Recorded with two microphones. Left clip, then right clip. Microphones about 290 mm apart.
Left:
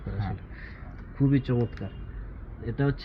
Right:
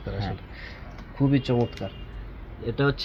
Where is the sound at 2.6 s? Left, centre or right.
Right.